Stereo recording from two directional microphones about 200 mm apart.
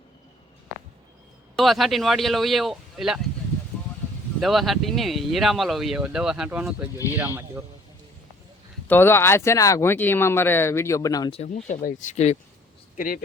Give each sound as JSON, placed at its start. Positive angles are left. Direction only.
{"t": 1.5, "sound": "speech", "side_deg": 0}
{"t": 4.4, "sound": "speech", "side_deg": 0}
{"t": 8.9, "sound": "speech", "side_deg": 10}
{"t": 11.3, "sound": "speech", "side_deg": 35}